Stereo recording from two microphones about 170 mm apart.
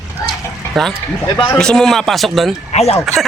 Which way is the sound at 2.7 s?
40° left (ahead or behind).